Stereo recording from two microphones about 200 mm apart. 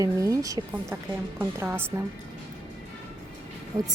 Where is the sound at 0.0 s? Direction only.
15° right (ahead or behind).